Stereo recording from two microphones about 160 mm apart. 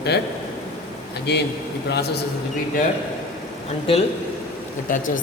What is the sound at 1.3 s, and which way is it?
Speech, 90° left.